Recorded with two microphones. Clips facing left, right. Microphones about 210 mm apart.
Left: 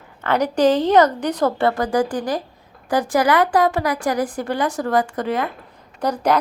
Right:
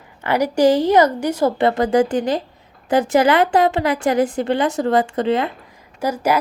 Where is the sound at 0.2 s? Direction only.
10° right (ahead or behind).